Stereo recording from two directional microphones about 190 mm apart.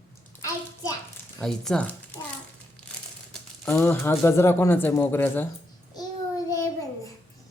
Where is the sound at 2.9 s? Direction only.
5° left (ahead or behind).